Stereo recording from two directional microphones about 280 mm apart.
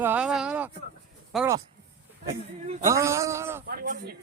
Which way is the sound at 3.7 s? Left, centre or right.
Right.